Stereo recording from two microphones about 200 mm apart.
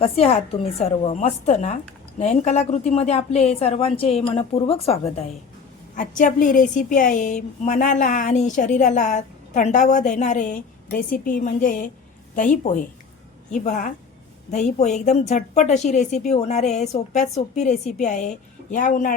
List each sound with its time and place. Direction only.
0.0 s a woman's voice: 30° left (ahead or behind)